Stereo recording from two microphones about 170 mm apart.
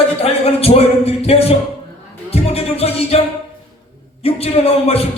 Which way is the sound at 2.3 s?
35° left (ahead or behind).